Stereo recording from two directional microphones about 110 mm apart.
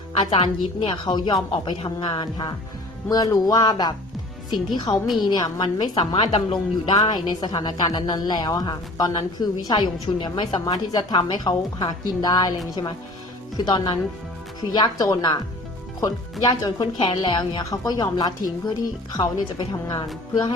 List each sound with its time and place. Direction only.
0.1 s a woman's voice: 55° left (ahead or behind)
5.0 s a woman's voice: centre (ahead or behind)
5.3 s a woman's voice: 40° left (ahead or behind)
13.6 s a woman's voice: 40° left (ahead or behind)